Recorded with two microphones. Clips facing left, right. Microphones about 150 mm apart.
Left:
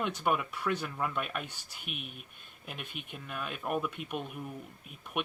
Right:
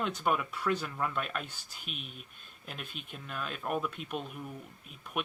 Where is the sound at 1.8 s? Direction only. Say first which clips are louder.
Left 2 dB; 55° left (ahead or behind).